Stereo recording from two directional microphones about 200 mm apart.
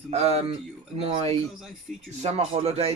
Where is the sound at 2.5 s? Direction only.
30° right (ahead or behind).